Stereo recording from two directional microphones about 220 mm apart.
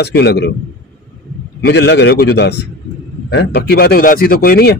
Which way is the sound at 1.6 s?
50° left (ahead or behind).